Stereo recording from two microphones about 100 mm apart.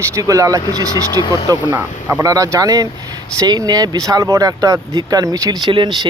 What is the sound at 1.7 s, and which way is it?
Speech, 20° right (ahead or behind).